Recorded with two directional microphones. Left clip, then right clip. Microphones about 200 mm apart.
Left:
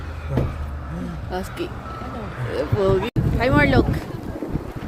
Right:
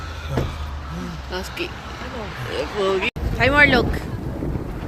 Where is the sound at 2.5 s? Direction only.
35° left (ahead or behind).